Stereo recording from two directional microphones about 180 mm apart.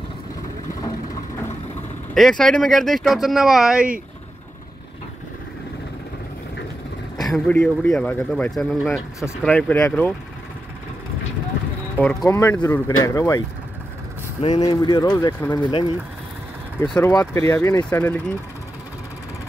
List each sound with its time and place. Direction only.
2.1 s speech: centre (ahead or behind)
7.2 s speech: 5° left (ahead or behind)
12.0 s speech: 5° left (ahead or behind)
12.3 s speech: 15° left (ahead or behind)
14.4 s speech: 25° left (ahead or behind)
16.9 s speech: 15° left (ahead or behind)